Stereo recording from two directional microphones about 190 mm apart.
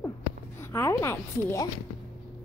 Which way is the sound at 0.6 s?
15° left (ahead or behind).